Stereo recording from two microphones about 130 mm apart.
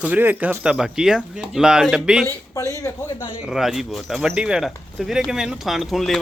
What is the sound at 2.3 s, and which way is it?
Speech, 25° left (ahead or behind).